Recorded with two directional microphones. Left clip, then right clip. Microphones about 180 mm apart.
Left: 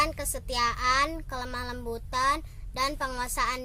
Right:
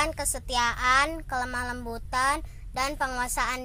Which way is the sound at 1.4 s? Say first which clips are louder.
Right 3 dB; 5° left (ahead or behind).